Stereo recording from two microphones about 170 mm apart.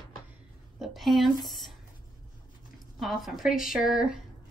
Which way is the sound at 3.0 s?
Centre (ahead or behind).